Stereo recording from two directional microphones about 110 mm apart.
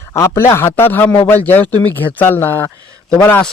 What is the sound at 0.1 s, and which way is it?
Speech, 25° left (ahead or behind).